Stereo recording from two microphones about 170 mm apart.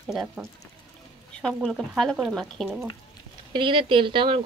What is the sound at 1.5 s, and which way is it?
Speech, centre (ahead or behind).